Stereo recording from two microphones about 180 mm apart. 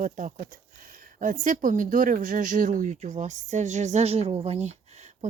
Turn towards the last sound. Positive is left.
turn(degrees=-40)  # may be behind; listen again after turning